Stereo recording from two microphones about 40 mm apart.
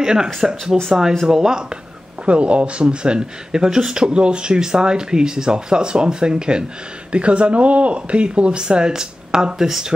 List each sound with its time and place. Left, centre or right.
0.0 s speech: centre
2.2 s a man's voice: right; by 9.9 s centre